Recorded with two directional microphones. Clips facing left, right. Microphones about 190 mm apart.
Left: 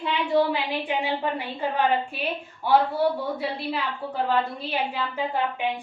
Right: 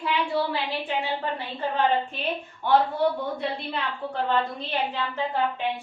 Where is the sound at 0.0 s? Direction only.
25° left (ahead or behind).